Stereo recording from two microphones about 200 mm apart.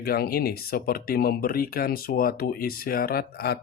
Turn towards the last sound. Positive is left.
turn(degrees=50)  # may be behind; listen again after turning